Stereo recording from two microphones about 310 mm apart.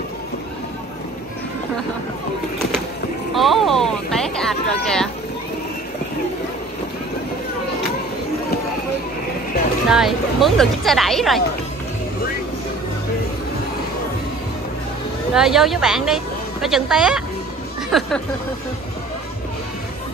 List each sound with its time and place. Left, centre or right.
3.3 s speech: centre
9.8 s speech: centre
15.3 s speech: centre